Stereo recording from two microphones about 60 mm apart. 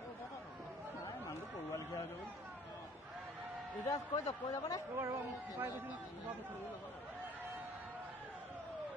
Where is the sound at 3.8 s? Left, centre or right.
Left.